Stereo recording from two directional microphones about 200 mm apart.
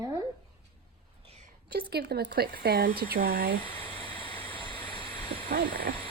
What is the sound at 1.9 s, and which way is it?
Speech, 55° right (ahead or behind).